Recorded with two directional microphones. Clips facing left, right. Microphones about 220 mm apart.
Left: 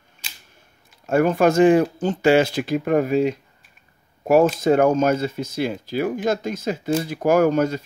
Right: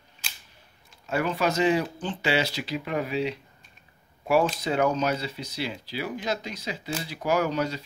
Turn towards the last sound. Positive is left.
turn(degrees=50)  # may be behind; listen again after turning